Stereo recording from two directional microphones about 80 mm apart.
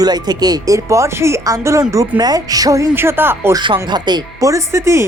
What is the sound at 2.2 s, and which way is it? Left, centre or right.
Speech, right.